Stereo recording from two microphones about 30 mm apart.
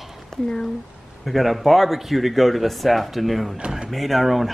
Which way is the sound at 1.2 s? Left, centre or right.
Centre.